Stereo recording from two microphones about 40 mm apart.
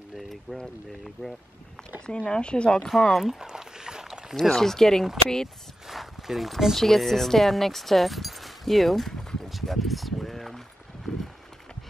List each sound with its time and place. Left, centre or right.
0.1 s boat: centre
2.0 s speech: left
2.9 s speech: centre
3.3 s a sound: centre
4.4 s speech: centre
5.9 s speech: centre
9.5 s a sound: centre